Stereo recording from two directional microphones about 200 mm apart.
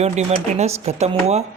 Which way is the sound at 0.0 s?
35° right (ahead or behind).